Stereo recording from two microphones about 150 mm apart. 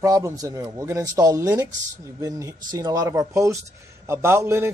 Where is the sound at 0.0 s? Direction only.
25° right (ahead or behind).